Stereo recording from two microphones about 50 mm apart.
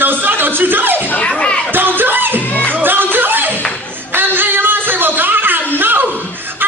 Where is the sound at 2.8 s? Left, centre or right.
Right.